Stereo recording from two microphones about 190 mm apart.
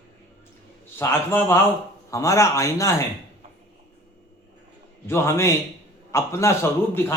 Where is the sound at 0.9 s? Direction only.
10° left (ahead or behind).